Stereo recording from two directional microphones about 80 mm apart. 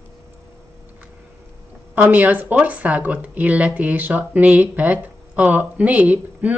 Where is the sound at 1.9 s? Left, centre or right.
Right.